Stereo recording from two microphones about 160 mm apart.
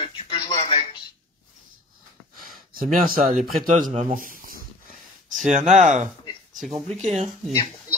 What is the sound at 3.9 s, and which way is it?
Speech, 40° right (ahead or behind).